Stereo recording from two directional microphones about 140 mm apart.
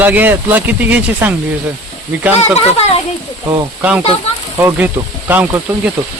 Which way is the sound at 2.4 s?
45° left (ahead or behind).